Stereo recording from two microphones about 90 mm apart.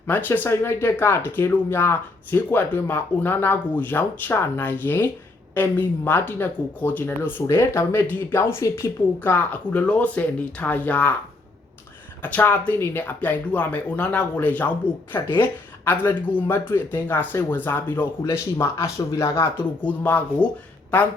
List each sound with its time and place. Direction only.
0.1 s speech: 20° left (ahead or behind)
9.3 s speech: 15° left (ahead or behind)
12.2 s speech: 20° left (ahead or behind)
18.6 s speech: 30° left (ahead or behind)
19.8 s speech: 20° left (ahead or behind)